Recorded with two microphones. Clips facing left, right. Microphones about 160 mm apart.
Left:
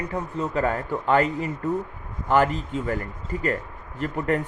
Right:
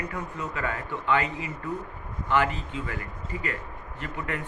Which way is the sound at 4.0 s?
40° left (ahead or behind).